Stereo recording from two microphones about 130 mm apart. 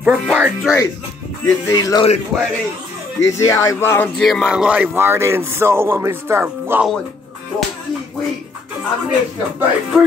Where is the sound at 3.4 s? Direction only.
25° left (ahead or behind).